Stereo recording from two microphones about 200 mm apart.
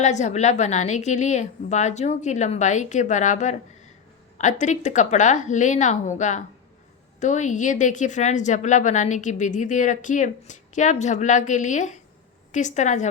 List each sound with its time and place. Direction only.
0.0 s a woman's voice: 35° left (ahead or behind)